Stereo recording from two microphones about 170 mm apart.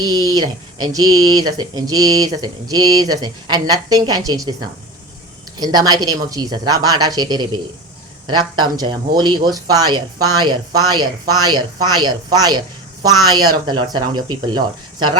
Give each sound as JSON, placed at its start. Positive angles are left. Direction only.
{"t": 0.0, "sound": "speech", "side_deg": -25}
{"t": 5.5, "sound": "speech", "side_deg": -25}